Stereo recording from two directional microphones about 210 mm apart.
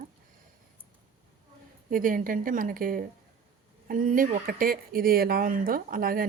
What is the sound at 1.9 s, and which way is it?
Speech, 40° right (ahead or behind).